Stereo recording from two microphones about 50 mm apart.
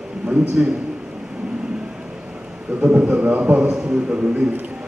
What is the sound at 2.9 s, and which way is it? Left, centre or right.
A man's voice, right.